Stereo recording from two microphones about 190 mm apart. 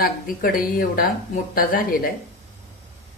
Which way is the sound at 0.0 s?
50° left (ahead or behind).